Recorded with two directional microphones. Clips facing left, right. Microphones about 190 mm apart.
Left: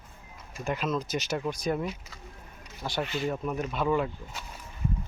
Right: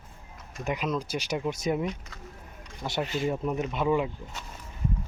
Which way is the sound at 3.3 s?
20° right (ahead or behind).